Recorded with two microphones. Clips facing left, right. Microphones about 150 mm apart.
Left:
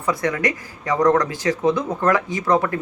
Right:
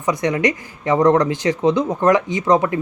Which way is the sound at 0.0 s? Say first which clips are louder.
Right 3 dB; 20° right (ahead or behind).